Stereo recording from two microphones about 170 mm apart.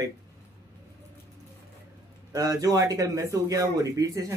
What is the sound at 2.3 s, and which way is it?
Speech, 20° right (ahead or behind).